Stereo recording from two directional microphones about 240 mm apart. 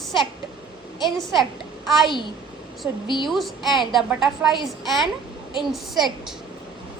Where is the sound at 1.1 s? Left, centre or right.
Centre.